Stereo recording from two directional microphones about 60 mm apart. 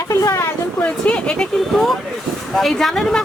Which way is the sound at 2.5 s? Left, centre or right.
Centre.